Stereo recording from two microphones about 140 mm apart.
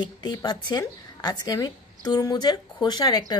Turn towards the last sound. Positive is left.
turn(degrees=30)  # may be behind; listen again after turning